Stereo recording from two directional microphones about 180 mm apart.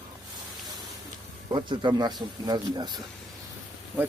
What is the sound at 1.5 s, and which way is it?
Speech, 25° right (ahead or behind).